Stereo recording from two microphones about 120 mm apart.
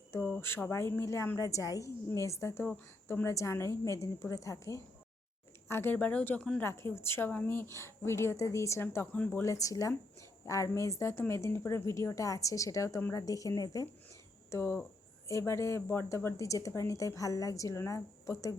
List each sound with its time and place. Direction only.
0.2 s a woman's voice: 10° left (ahead or behind)
9.4 s a woman's voice: 25° left (ahead or behind)